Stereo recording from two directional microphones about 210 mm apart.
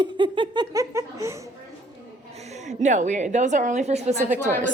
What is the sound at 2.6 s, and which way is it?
A woman's voice, 35° right (ahead or behind).